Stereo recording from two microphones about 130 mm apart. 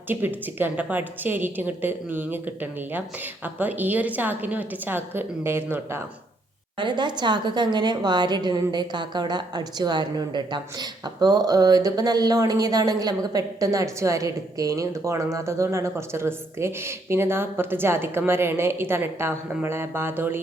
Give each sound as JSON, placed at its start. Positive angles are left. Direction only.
{"t": 0.1, "sound": "a woman's voice", "side_deg": -15}
{"t": 6.7, "sound": "a woman's voice", "side_deg": -35}